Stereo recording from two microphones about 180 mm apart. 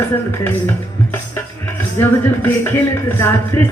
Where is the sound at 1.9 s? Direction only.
10° left (ahead or behind).